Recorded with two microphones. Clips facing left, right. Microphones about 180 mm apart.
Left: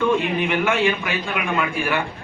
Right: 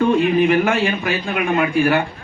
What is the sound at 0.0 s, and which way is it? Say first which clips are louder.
Speech: right 5 dB; 40° right (ahead or behind).